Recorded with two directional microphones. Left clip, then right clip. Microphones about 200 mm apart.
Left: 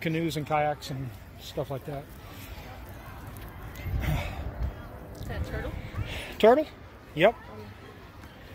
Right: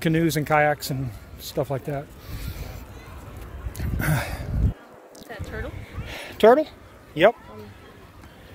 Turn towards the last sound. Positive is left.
turn(degrees=-50)  # may be behind; listen again after turning